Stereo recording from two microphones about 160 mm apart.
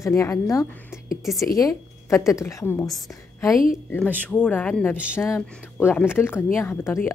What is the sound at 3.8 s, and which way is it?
A woman's voice, 10° left (ahead or behind).